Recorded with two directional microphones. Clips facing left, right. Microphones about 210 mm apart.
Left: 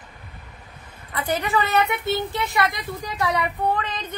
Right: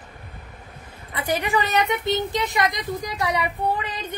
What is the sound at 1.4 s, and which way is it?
Speech, 15° right (ahead or behind).